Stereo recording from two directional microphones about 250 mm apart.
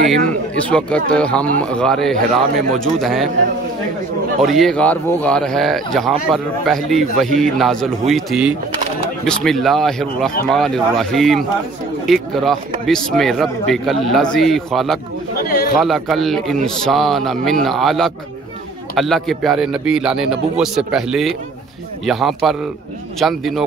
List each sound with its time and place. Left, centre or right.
0.6 s speech: centre
4.4 s speech: centre
15.3 s a sound: left
15.7 s speech: centre